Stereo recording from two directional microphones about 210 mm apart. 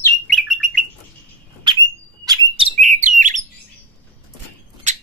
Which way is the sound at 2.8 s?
35° right (ahead or behind).